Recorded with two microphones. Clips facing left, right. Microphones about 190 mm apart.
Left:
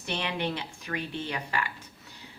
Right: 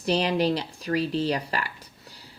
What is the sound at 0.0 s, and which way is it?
A woman's voice, 35° right (ahead or behind).